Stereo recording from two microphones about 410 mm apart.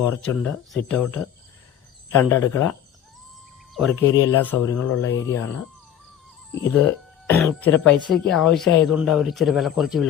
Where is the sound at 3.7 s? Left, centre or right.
Centre.